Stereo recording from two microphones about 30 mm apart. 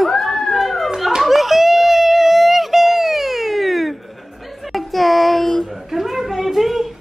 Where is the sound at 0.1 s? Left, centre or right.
Centre.